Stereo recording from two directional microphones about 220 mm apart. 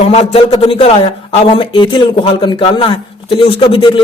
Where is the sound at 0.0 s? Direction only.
30° left (ahead or behind).